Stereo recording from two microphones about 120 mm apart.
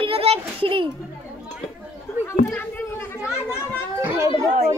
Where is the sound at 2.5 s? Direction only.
20° left (ahead or behind).